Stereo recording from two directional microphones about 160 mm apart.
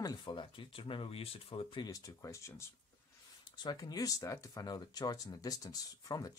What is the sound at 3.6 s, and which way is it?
Speech, 25° left (ahead or behind).